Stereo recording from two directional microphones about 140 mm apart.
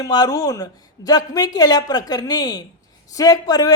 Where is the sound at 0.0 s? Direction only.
25° left (ahead or behind).